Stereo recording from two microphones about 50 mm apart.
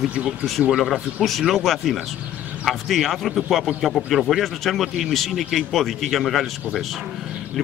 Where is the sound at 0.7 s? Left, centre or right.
Centre.